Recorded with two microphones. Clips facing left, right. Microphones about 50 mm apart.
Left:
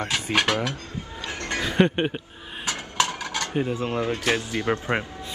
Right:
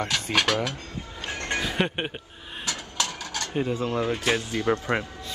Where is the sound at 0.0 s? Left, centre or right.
Left.